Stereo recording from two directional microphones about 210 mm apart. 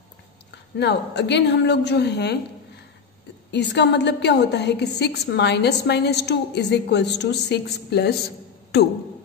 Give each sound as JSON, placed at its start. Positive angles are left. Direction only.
{"t": 0.7, "sound": "a woman's voice", "side_deg": 55}
{"t": 3.5, "sound": "a woman's voice", "side_deg": 55}